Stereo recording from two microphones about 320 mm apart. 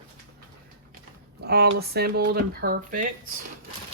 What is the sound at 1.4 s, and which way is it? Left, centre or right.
Speech, right.